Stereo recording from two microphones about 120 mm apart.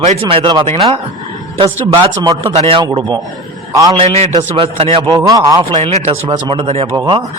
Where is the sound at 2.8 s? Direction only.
35° right (ahead or behind).